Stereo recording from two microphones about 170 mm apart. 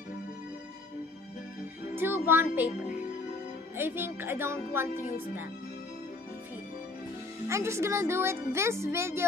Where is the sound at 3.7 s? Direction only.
10° right (ahead or behind).